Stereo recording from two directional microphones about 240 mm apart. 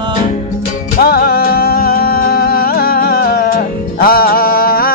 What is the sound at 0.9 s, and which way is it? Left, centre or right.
Music, left.